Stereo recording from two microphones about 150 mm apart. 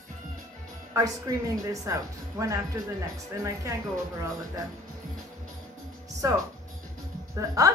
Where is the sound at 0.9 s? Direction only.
20° right (ahead or behind).